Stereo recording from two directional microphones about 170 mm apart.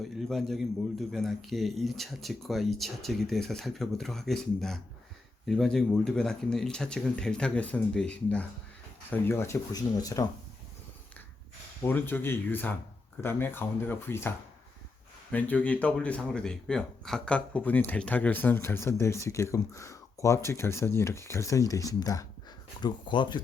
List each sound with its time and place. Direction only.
0.2 s a man's voice: centre (ahead or behind); by 10.2 s 20° left (ahead or behind)
11.8 s speech: 10° left (ahead or behind)